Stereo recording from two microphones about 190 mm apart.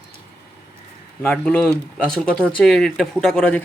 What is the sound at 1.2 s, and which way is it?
Speech, 10° left (ahead or behind).